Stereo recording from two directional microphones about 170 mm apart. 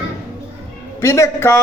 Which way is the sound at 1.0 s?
15° left (ahead or behind).